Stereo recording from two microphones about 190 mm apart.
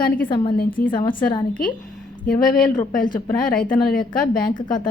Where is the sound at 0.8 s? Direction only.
50° left (ahead or behind).